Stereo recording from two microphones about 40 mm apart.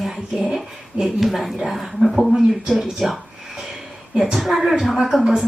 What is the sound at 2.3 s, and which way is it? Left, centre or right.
Speech, centre.